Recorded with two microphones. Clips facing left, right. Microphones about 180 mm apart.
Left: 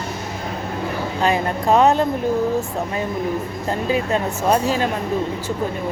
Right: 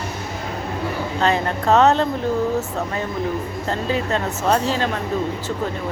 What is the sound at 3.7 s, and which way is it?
A woman's voice, 15° left (ahead or behind).